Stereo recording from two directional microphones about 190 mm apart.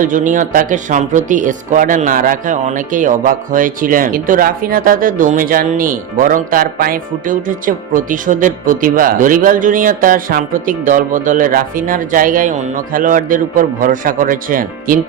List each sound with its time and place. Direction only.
0.0 s speech: 45° right (ahead or behind)